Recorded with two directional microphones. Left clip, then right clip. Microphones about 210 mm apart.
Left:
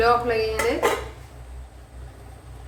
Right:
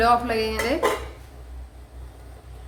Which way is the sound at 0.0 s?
50° right (ahead or behind).